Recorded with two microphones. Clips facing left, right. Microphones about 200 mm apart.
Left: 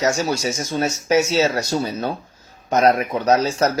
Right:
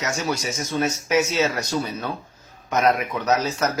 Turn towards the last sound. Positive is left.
turn(degrees=30)  # may be behind; listen again after turning